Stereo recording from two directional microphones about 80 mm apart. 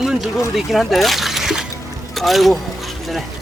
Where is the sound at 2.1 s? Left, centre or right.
Centre.